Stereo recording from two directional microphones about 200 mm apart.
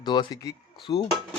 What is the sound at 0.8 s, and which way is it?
Speech, 30° left (ahead or behind).